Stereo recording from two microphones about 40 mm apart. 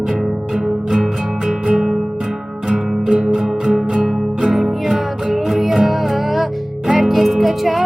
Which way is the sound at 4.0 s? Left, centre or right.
Centre.